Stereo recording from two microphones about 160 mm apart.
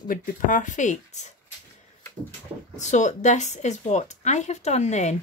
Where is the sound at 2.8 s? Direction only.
50° left (ahead or behind).